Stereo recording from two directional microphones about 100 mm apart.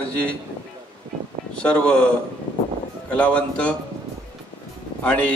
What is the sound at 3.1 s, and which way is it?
Speech, 10° left (ahead or behind).